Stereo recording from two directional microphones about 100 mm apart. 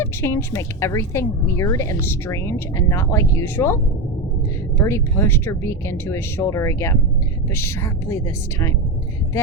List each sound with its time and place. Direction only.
0.0 s a woman's voice: 25° left (ahead or behind)
4.8 s a woman's voice: 25° left (ahead or behind)